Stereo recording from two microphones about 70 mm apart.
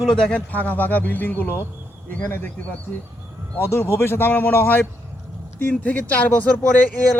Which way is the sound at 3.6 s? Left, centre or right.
Left.